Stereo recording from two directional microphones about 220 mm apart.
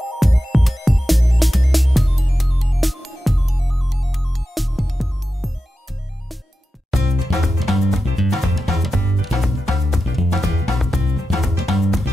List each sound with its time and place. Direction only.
0.2 s music: centre (ahead or behind)
6.9 s music: centre (ahead or behind)